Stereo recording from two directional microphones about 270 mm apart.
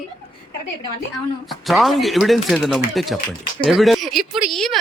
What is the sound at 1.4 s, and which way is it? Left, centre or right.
A man's voice, centre.